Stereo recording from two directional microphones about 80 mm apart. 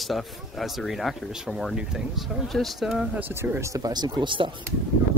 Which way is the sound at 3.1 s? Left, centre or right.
Right.